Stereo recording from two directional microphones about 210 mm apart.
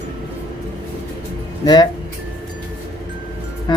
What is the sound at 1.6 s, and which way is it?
Speech, 20° left (ahead or behind).